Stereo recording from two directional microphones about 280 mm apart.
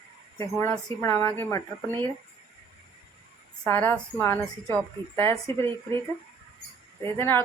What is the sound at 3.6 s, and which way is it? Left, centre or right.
A woman's voice, centre.